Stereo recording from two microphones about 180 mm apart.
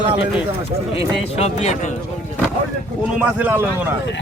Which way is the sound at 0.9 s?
35° left (ahead or behind).